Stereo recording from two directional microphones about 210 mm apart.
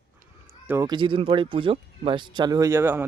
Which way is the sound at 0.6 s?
10° right (ahead or behind).